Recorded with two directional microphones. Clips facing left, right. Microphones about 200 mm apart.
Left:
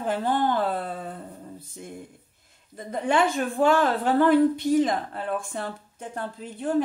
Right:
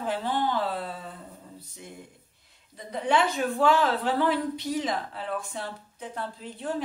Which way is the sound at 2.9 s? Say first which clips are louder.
Left 2 dB; 50° left (ahead or behind).